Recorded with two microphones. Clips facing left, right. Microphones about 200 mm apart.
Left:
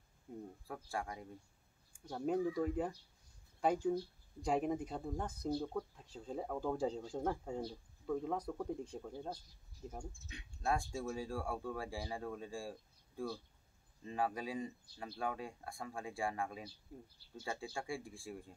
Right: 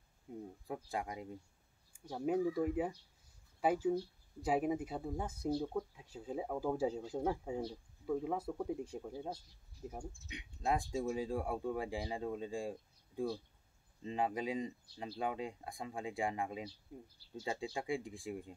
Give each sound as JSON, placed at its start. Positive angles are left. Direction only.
{"t": 0.3, "sound": "speech", "side_deg": -10}
{"t": 0.7, "sound": "speech", "side_deg": -20}
{"t": 1.9, "sound": "speech", "side_deg": -5}